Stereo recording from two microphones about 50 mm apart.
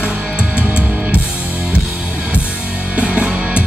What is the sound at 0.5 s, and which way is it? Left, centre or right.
Music, right.